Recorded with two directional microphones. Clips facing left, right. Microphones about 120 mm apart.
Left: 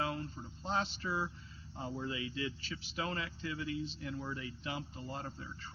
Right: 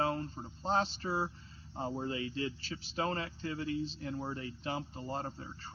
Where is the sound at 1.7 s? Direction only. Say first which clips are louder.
Right 3 dB; 40° right (ahead or behind).